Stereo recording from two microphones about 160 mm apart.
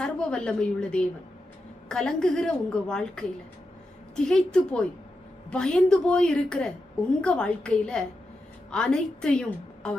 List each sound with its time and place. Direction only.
0.0 s a woman's voice: 5° left (ahead or behind)